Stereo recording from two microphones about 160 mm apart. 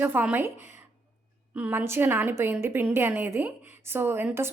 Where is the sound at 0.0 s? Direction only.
10° right (ahead or behind).